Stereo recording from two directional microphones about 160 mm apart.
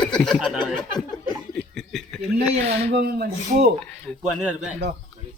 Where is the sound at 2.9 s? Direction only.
70° right (ahead or behind).